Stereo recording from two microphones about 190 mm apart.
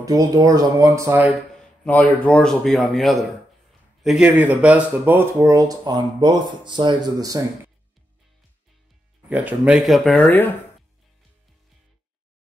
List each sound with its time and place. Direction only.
0.0 s speech: 20° right (ahead or behind)
1.9 s a man's voice: 10° left (ahead or behind); by 7.4 s 20° right (ahead or behind)
9.3 s a man's voice: 10° right (ahead or behind); by 10.5 s 10° left (ahead or behind)